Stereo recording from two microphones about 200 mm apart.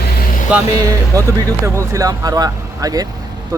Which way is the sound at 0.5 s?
5° right (ahead or behind).